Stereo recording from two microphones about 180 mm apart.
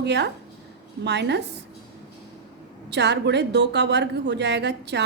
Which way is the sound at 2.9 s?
75° right (ahead or behind).